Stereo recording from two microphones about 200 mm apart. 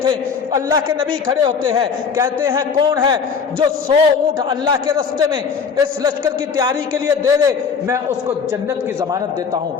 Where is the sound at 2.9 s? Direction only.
25° right (ahead or behind).